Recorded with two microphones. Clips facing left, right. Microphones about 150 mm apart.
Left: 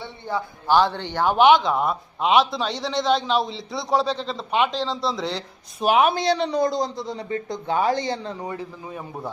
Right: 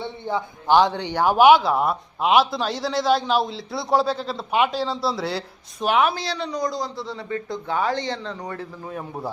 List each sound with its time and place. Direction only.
0.0 s a man's voice: 20° right (ahead or behind)
6.1 s a man's voice: 20° left (ahead or behind); by 9.0 s 5° left (ahead or behind)